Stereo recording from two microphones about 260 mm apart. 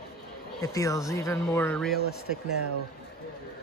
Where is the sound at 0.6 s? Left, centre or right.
Centre.